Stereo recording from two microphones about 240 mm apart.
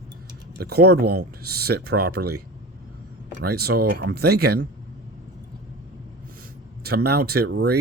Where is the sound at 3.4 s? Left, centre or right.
Right.